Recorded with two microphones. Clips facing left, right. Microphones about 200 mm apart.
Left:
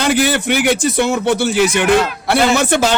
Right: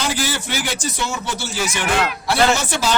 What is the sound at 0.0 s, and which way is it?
Speech, 60° left (ahead or behind).